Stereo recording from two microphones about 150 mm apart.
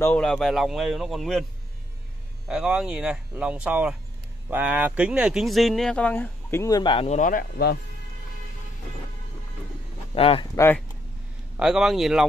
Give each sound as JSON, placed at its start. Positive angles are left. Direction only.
{"t": 0.0, "sound": "speech", "side_deg": 5}
{"t": 2.4, "sound": "speech", "side_deg": -5}
{"t": 6.8, "sound": "speech", "side_deg": 35}
{"t": 7.1, "sound": "speech", "side_deg": 60}
{"t": 10.1, "sound": "speech", "side_deg": 40}
{"t": 10.5, "sound": "speech", "side_deg": 15}
{"t": 11.5, "sound": "speech", "side_deg": -5}